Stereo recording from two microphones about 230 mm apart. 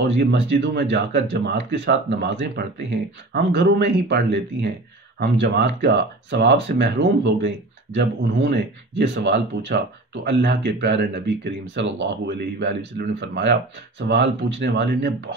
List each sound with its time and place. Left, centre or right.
0.2 s speech: right